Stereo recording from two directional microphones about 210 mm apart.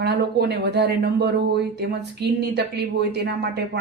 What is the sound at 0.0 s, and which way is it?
Speech, 50° right (ahead or behind).